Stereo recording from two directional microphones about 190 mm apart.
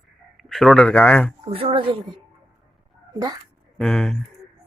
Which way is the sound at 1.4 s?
30° right (ahead or behind).